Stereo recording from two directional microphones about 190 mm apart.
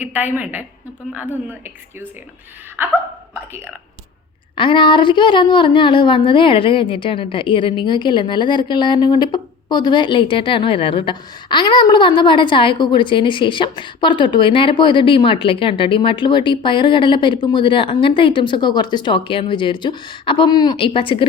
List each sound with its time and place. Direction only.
0.0 s a woman's voice: 10° right (ahead or behind)
2.8 s hiccup: 10° right (ahead or behind)
4.5 s a woman's voice: 25° left (ahead or behind)